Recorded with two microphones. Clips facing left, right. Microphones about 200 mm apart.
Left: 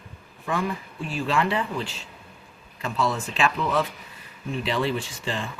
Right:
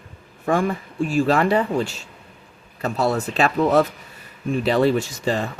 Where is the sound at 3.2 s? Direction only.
40° right (ahead or behind).